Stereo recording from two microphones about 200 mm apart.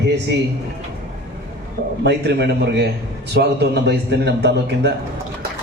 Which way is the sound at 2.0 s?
55° right (ahead or behind).